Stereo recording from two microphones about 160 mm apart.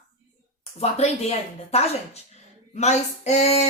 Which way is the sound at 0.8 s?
40° left (ahead or behind).